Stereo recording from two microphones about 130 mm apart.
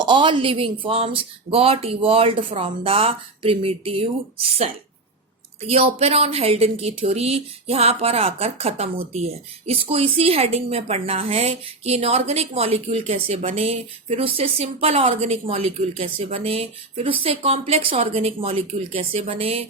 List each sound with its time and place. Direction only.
0.0 s a woman's voice: 40° right (ahead or behind)